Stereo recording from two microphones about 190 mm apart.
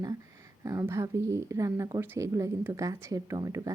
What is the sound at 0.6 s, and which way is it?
Speech, 15° right (ahead or behind).